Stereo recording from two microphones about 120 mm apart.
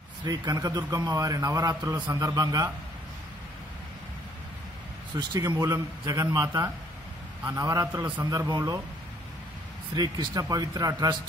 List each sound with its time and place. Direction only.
0.2 s a man's voice: 30° right (ahead or behind)
5.1 s a man's voice: 30° right (ahead or behind)
9.9 s speech: 35° right (ahead or behind)